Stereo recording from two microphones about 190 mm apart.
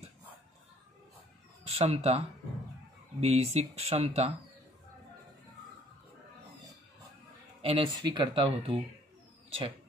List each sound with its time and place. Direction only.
1.8 s speech: 35° right (ahead or behind)
7.6 s speech: 30° right (ahead or behind)